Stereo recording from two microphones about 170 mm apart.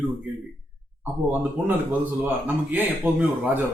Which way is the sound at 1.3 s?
10° right (ahead or behind).